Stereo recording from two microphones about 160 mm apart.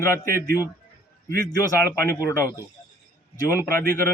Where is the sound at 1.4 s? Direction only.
20° left (ahead or behind).